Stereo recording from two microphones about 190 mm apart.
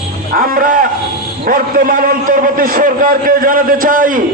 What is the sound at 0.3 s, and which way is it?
A man's voice, 50° right (ahead or behind).